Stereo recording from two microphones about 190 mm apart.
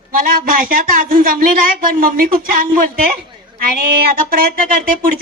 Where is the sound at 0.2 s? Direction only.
50° right (ahead or behind).